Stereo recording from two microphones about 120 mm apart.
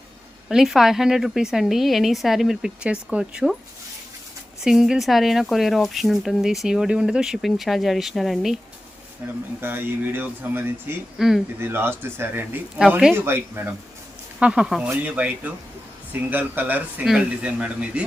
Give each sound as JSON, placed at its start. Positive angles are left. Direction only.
{"t": 0.4, "sound": "speech", "side_deg": -5}
{"t": 4.6, "sound": "speech", "side_deg": -5}
{"t": 9.2, "sound": "speech", "side_deg": -15}
{"t": 11.2, "sound": "speech", "side_deg": -5}
{"t": 11.6, "sound": "speech", "side_deg": -20}
{"t": 14.3, "sound": "speech", "side_deg": -10}